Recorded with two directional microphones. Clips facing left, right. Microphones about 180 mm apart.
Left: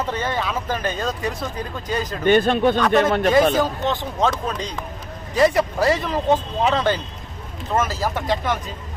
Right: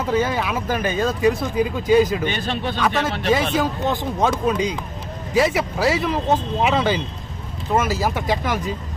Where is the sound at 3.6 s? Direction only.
10° right (ahead or behind).